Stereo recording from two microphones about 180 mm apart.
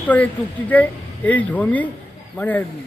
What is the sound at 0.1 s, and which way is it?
Speech, 10° left (ahead or behind).